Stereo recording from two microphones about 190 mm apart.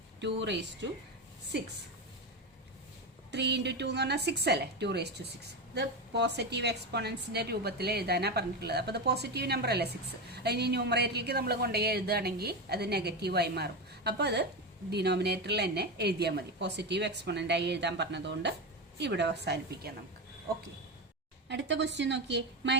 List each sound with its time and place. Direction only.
0.2 s a woman's voice: 65° right (ahead or behind)
3.3 s a woman's voice: 65° right (ahead or behind)
21.5 s a woman's voice: 65° right (ahead or behind)